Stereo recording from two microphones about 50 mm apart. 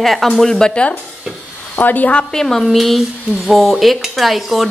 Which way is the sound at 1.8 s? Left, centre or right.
Left.